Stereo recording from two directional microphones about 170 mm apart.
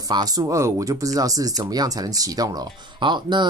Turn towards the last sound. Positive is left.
turn(degrees=-25)  # may be behind; listen again after turning